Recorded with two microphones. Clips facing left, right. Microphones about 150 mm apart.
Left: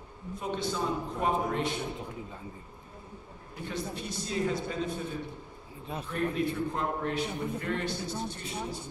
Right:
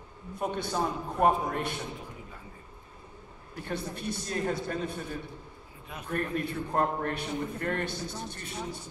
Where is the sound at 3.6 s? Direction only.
55° right (ahead or behind).